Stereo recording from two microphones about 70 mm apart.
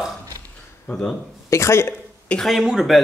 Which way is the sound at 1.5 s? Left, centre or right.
Left.